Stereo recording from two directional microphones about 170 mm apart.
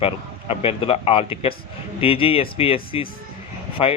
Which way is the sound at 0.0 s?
35° left (ahead or behind).